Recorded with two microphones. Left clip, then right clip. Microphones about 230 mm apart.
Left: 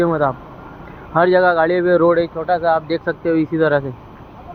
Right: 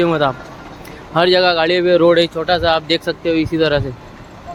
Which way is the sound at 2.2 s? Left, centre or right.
Right.